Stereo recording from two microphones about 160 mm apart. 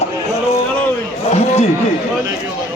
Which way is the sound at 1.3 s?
40° left (ahead or behind).